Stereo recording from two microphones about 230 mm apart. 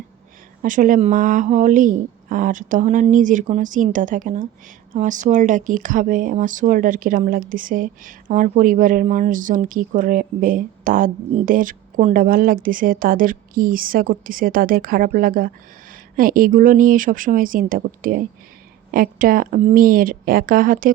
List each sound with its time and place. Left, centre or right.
0.6 s speech: right